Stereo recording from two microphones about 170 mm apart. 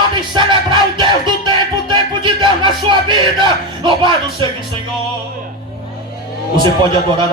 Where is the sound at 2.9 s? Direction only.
25° right (ahead or behind).